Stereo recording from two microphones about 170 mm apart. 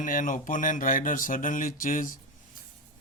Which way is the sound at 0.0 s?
50° left (ahead or behind).